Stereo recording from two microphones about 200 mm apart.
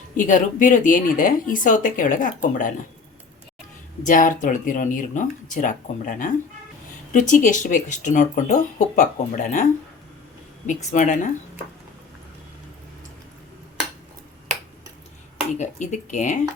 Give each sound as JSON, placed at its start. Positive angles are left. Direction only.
{"t": 0.2, "sound": "speech", "side_deg": 40}
{"t": 4.0, "sound": "speech", "side_deg": 40}
{"t": 10.9, "sound": "speech", "side_deg": 40}
{"t": 15.5, "sound": "speech", "side_deg": 35}